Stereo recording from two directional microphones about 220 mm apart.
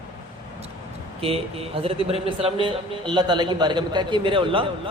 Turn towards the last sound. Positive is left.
turn(degrees=-25)  # may be behind; listen again after turning